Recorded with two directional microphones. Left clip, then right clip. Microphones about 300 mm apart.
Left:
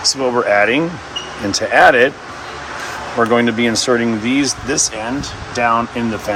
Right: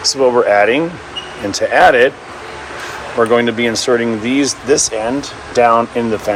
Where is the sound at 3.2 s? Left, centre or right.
Centre.